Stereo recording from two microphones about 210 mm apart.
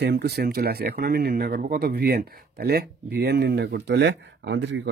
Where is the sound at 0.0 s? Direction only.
50° right (ahead or behind).